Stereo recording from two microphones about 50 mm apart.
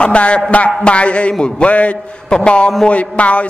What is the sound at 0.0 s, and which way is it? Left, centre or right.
A man's voice, left.